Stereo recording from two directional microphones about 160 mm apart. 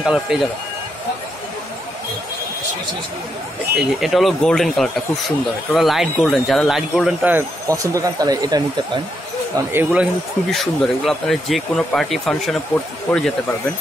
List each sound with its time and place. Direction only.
0.0 s speech: 5° right (ahead or behind)
3.7 s speech: centre (ahead or behind)
7.3 s speech: 20° right (ahead or behind)
9.6 s speech: 15° right (ahead or behind)
10.5 s speech: centre (ahead or behind)